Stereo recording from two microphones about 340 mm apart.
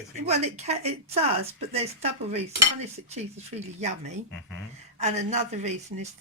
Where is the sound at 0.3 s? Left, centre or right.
Centre.